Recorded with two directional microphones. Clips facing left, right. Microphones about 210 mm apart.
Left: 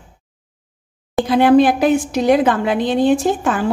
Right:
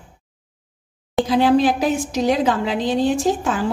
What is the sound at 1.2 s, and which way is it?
A woman's voice, 55° left (ahead or behind).